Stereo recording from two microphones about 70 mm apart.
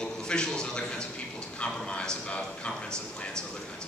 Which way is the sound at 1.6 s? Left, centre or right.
Centre.